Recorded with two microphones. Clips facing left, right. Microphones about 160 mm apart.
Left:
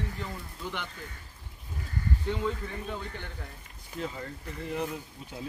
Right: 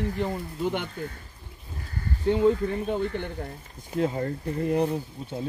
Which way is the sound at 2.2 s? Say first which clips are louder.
Right 13 dB; 50° right (ahead or behind).